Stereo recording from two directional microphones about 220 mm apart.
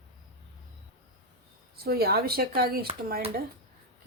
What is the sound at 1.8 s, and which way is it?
Speech, 45° right (ahead or behind).